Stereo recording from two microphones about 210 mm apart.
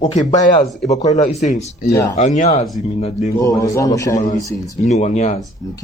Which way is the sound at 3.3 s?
15° left (ahead or behind).